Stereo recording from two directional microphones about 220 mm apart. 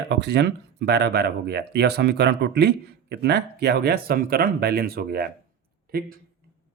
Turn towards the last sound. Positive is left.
turn(degrees=-45)  # may be behind; listen again after turning